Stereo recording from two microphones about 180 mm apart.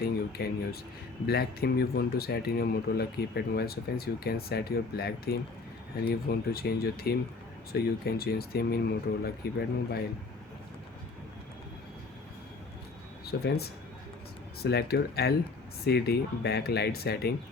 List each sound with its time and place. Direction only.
0.0 s speech: 60° left (ahead or behind)
13.2 s speech: 60° left (ahead or behind)